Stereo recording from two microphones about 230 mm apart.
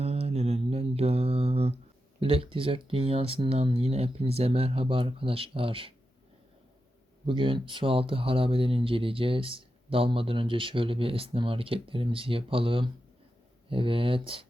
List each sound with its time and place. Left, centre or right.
0.0 s mantra: right
2.2 s speech: right
7.3 s speech: right